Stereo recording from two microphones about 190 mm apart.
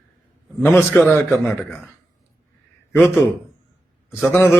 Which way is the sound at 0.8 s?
5° left (ahead or behind).